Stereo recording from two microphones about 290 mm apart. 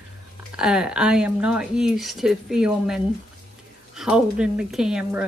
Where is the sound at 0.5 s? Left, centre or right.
Centre.